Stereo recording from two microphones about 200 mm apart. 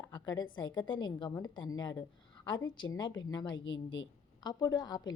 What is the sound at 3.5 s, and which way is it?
Speech, 70° left (ahead or behind).